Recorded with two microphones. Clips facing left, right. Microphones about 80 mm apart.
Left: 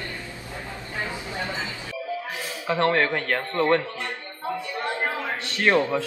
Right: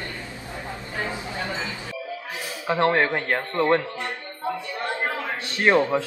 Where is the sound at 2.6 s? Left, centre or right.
Right.